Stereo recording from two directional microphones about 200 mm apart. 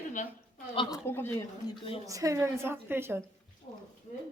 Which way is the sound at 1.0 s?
10° left (ahead or behind).